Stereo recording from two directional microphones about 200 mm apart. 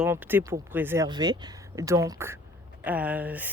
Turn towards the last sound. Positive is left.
turn(degrees=-10)  # may be behind; listen again after turning